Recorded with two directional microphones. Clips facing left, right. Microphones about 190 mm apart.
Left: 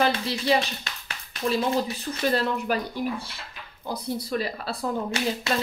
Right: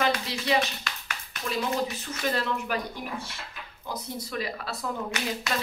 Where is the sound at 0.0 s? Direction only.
30° left (ahead or behind).